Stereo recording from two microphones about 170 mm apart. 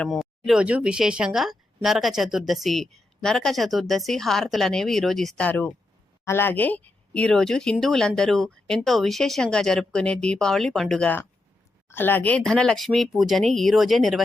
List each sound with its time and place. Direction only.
0.0 s speech: centre (ahead or behind)